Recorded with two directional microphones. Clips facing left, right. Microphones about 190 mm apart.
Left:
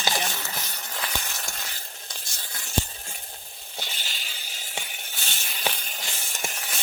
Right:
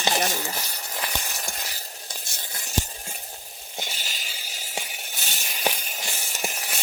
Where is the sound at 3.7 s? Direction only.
15° right (ahead or behind).